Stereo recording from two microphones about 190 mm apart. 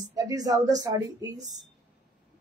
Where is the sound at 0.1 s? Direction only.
20° right (ahead or behind).